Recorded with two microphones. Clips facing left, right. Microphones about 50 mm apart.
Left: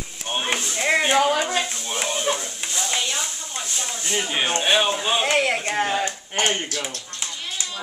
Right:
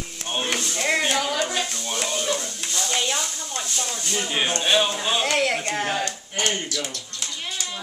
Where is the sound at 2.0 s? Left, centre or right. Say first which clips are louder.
Left 2 dB; centre.